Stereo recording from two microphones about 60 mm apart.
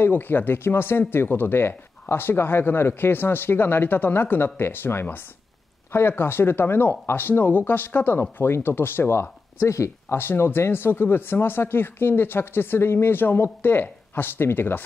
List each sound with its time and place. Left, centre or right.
0.0 s speech: left
10.1 s speech: left